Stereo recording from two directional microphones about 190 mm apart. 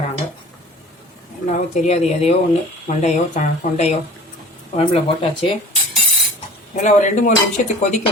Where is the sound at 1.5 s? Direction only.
35° left (ahead or behind).